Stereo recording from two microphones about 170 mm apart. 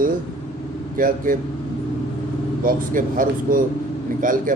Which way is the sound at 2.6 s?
55° right (ahead or behind).